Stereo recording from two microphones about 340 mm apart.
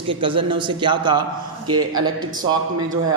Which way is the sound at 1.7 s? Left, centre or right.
Right.